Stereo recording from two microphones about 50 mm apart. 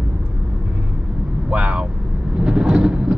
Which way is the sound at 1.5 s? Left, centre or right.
Right.